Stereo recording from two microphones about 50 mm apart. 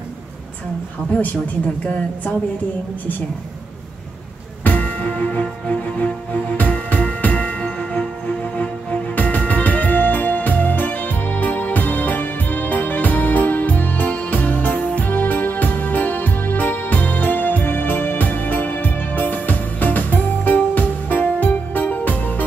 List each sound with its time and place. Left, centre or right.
4.6 s music: left